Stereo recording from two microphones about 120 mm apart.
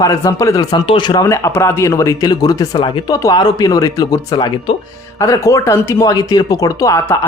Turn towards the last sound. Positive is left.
turn(degrees=25)  # may be behind; listen again after turning